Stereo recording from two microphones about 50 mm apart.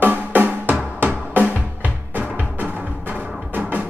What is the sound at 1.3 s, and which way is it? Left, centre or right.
Music, right.